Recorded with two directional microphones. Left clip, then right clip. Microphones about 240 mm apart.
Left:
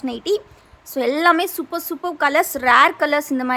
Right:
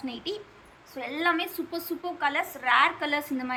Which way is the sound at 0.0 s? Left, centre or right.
Centre.